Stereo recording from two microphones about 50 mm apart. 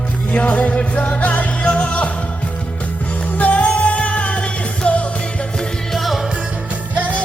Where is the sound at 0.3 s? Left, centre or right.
Left.